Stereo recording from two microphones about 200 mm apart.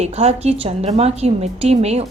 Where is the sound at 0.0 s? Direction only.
30° right (ahead or behind).